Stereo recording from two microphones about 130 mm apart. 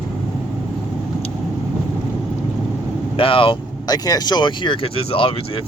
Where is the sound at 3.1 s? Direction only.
45° left (ahead or behind).